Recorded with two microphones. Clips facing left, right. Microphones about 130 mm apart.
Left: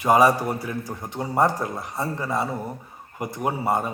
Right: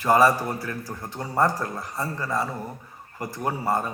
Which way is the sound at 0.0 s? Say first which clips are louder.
Left 1 dB; 15° left (ahead or behind).